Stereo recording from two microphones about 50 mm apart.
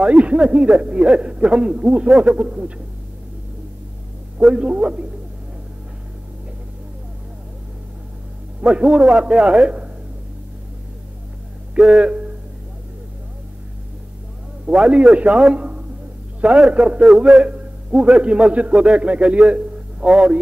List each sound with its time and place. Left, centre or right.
0.0 s a man's voice: right
4.4 s a man's voice: right
8.5 s a man's voice: right
11.8 s a man's voice: centre
14.7 s a man's voice: right
15.5 s a sound: right
16.3 s a man's voice: centre
17.0 s a man's voice: centre
17.4 s a man's voice: right